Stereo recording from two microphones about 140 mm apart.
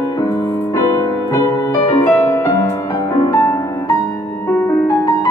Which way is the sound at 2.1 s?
20° left (ahead or behind).